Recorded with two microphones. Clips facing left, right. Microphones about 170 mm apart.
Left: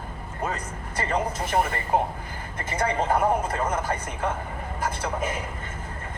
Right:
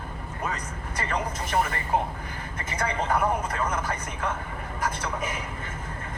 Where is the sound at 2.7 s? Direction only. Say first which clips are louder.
Left 3 dB; 30° left (ahead or behind).